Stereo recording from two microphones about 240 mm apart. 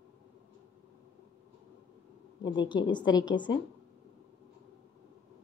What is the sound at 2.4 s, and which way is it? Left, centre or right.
A woman's voice, centre.